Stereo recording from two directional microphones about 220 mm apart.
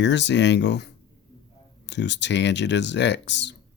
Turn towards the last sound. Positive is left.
turn(degrees=55)  # may be behind; listen again after turning